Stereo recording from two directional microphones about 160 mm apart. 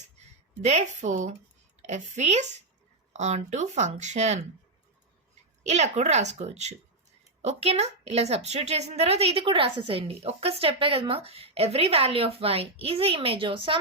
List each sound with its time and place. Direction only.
0.6 s speech: 45° right (ahead or behind)
5.6 s a woman's voice: 45° right (ahead or behind)